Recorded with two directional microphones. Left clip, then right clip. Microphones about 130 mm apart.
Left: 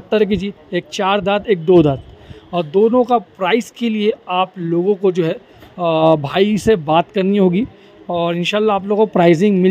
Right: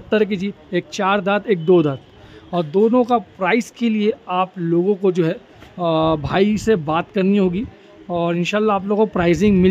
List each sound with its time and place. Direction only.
0.1 s speech: 15° left (ahead or behind)